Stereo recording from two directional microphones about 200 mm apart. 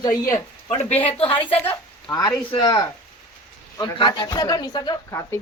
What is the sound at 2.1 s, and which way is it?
Speech, 15° left (ahead or behind).